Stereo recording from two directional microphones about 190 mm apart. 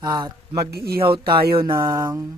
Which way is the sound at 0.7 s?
55° right (ahead or behind).